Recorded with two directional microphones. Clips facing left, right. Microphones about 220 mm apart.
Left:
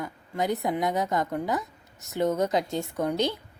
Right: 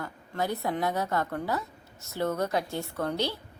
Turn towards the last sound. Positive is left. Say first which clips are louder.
# left 4 dB
turn(degrees=20)  # may be behind; listen again after turning